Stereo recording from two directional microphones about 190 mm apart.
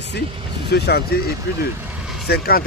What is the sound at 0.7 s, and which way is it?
Speech, 60° left (ahead or behind).